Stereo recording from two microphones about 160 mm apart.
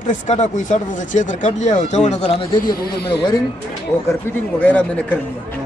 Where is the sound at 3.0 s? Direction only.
25° left (ahead or behind).